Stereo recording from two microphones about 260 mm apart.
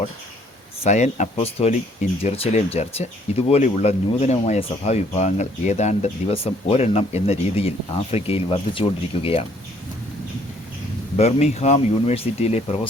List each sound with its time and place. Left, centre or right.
0.9 s speech: left
11.2 s speech: left